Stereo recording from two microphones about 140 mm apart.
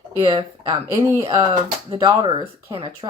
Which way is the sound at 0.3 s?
20° right (ahead or behind).